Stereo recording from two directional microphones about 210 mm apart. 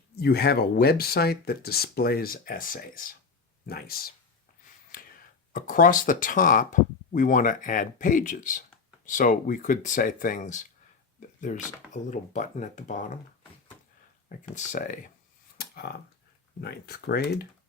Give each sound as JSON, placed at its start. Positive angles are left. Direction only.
{"t": 0.2, "sound": "speech", "side_deg": 50}
{"t": 5.5, "sound": "speech", "side_deg": 40}
{"t": 14.5, "sound": "speech", "side_deg": 40}
{"t": 15.5, "sound": "a sound", "side_deg": 45}
{"t": 16.6, "sound": "speech", "side_deg": 50}